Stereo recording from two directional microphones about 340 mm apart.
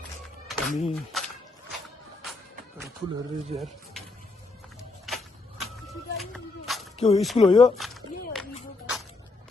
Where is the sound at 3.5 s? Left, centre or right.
Centre.